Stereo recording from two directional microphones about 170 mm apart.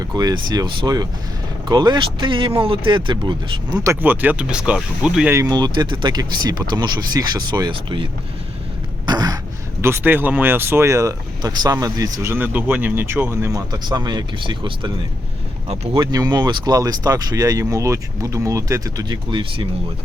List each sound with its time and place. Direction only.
0.0 s speech: 20° right (ahead or behind)
3.8 s speech: 10° right (ahead or behind)
5.3 s speech: 20° right (ahead or behind)
9.0 s a sound: 25° right (ahead or behind)
9.8 s speech: 15° right (ahead or behind); by 14.9 s 30° right (ahead or behind)
15.7 s speech: 40° right (ahead or behind)
16.0 s speech: 25° right (ahead or behind)